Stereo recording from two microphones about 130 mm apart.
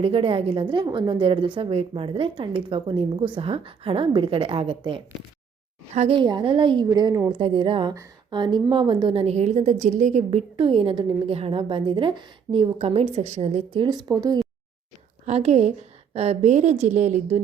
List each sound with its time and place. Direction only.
0.0 s a woman's voice: 45° right (ahead or behind)
5.9 s a woman's voice: 55° right (ahead or behind)
6.1 s a woman's voice: 35° right (ahead or behind)
9.2 s a woman's voice: 60° right (ahead or behind)
13.8 s a woman's voice: 30° right (ahead or behind)
15.3 s a woman's voice: 55° right (ahead or behind)